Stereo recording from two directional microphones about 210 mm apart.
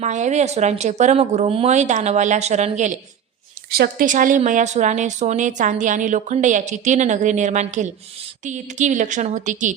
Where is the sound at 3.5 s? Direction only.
45° right (ahead or behind).